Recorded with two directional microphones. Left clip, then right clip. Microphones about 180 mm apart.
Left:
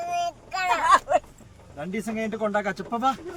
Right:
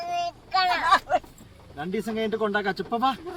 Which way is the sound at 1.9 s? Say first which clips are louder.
Right 3 dB; 15° left (ahead or behind).